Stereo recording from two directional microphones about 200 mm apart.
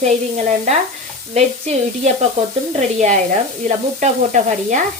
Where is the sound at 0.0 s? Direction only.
35° right (ahead or behind).